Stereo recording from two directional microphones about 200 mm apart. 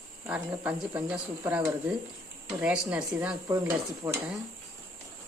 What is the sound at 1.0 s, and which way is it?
Speech, 5° right (ahead or behind).